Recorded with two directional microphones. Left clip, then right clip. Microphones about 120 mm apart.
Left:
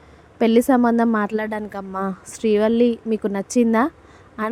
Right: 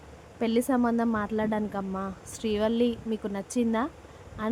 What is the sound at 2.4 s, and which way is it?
A woman's voice, 30° left (ahead or behind).